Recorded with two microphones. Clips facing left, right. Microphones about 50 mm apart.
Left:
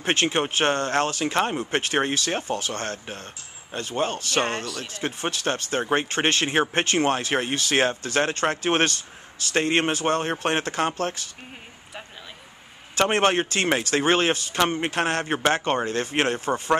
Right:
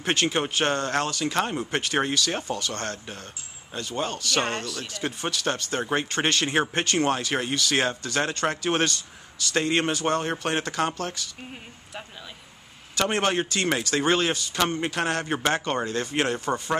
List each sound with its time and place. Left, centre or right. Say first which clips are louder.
0.0 s speech: left 2 dB; left
0.9 s speech: left 2 dB; left
1.3 s speech: left 2 dB; centre
1.8 s speech: left 1 dB; left
2.6 s speech: left 1 dB; centre
3.9 s speech: left 2 dB; left
13.1 s speech: left 3 dB; left
14.6 s speech: left 2 dB; left
14.9 s speech: left 2 dB; left